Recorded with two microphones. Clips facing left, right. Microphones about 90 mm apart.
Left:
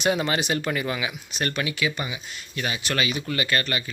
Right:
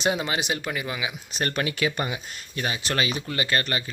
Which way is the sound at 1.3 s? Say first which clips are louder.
Right 1 dB; 40° right (ahead or behind).